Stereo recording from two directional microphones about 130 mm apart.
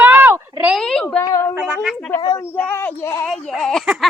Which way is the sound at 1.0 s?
20° left (ahead or behind).